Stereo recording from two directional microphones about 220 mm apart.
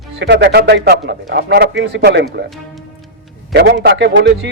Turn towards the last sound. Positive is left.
turn(degrees=-55)  # may be behind; listen again after turning